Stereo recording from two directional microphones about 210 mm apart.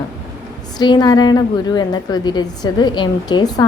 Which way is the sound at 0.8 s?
20° left (ahead or behind).